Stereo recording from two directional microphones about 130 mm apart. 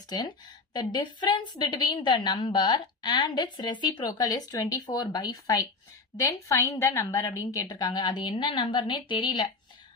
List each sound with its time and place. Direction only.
0.1 s a woman's voice: 35° left (ahead or behind)